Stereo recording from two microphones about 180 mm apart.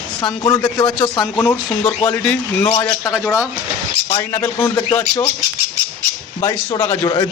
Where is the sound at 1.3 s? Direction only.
15° left (ahead or behind).